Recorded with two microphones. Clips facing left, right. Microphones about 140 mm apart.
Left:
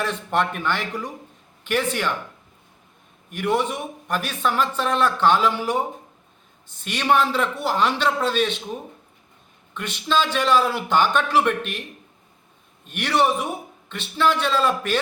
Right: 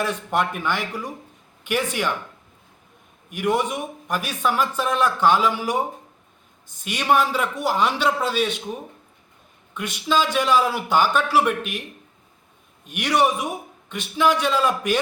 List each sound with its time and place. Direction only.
0.0 s a man's voice: 10° right (ahead or behind)
3.2 s a man's voice: 10° right (ahead or behind)
6.8 s a man's voice: 10° right (ahead or behind)
9.7 s a man's voice: 10° right (ahead or behind)
12.8 s a man's voice: 10° right (ahead or behind)